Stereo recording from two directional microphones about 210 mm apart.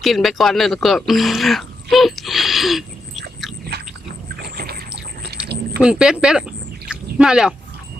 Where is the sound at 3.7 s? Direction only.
50° right (ahead or behind).